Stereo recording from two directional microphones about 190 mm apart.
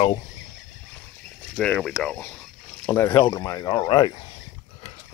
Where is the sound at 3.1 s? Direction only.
20° left (ahead or behind).